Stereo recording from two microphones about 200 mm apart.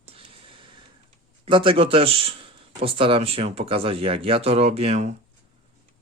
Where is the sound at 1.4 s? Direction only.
25° right (ahead or behind).